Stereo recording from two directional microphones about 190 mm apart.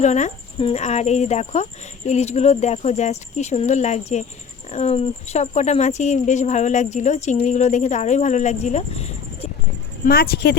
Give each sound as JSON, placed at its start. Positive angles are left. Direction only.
{"t": 0.0, "sound": "speech", "side_deg": 40}
{"t": 10.1, "sound": "speech", "side_deg": 55}